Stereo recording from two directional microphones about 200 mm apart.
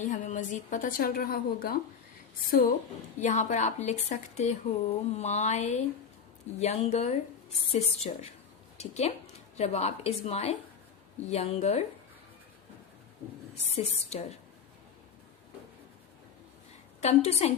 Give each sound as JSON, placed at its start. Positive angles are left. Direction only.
{"t": 0.0, "sound": "a woman's voice", "side_deg": 40}
{"t": 13.7, "sound": "a woman's voice", "side_deg": 30}
{"t": 17.0, "sound": "a woman's voice", "side_deg": 35}